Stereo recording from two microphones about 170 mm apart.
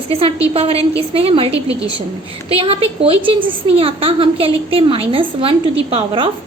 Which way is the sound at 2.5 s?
35° right (ahead or behind).